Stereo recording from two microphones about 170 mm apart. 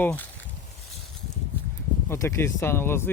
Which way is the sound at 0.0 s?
10° left (ahead or behind).